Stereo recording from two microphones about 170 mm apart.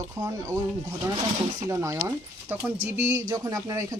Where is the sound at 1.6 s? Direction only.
20° right (ahead or behind).